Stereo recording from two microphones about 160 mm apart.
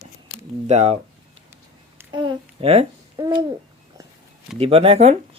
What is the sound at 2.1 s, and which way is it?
Babbling, 30° right (ahead or behind).